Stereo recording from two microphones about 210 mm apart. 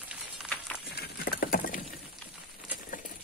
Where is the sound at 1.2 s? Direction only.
45° left (ahead or behind).